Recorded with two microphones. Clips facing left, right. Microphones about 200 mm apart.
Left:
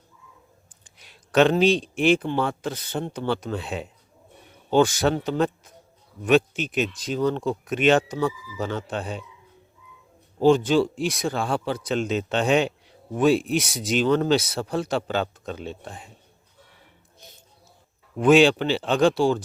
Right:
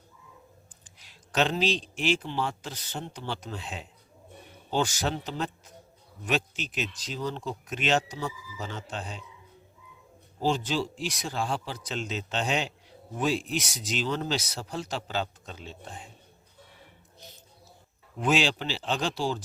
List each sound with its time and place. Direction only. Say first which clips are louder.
1.0 s speech: left 9 dB; 60° left (ahead or behind)
10.4 s speech: left 10 dB; 55° left (ahead or behind)
18.2 s speech: left 10 dB; 55° left (ahead or behind)